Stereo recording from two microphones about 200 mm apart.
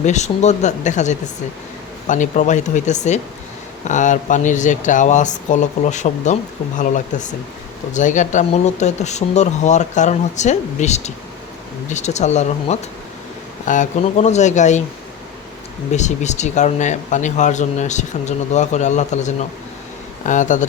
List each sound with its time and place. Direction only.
0.0 s speech: 35° left (ahead or behind)
15.9 s speech: 35° left (ahead or behind)